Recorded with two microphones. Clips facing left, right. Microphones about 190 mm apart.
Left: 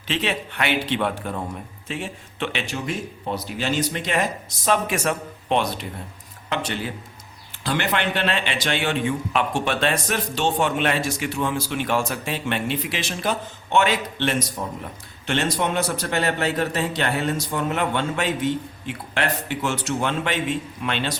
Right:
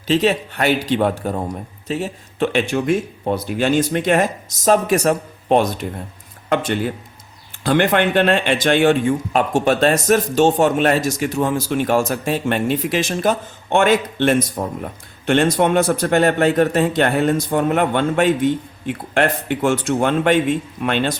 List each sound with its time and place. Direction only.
0.1 s speech: 40° right (ahead or behind)